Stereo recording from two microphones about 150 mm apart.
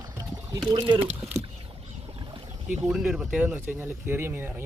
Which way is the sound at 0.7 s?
35° right (ahead or behind).